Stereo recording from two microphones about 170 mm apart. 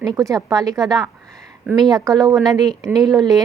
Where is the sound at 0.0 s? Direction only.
20° right (ahead or behind).